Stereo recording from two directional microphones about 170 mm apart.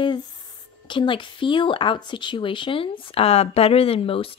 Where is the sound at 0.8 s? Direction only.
30° left (ahead or behind).